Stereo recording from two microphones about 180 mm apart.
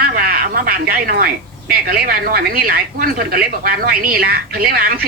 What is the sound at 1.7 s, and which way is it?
Speech, 55° right (ahead or behind).